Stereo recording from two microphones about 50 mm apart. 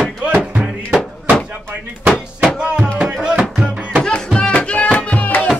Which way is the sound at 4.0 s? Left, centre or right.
Centre.